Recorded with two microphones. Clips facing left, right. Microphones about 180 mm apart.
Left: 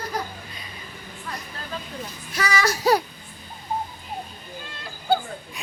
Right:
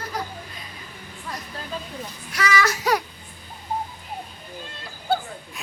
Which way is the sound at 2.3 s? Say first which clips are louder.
Right 1 dB; 35° left (ahead or behind).